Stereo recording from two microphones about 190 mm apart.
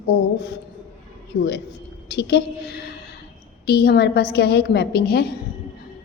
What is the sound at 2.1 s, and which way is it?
A woman's voice, 60° left (ahead or behind).